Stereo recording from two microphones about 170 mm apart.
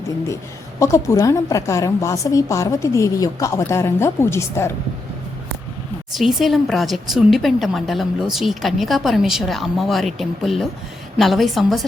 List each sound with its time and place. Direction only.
0.8 s a woman's voice: 20° left (ahead or behind)
6.1 s speech: centre (ahead or behind)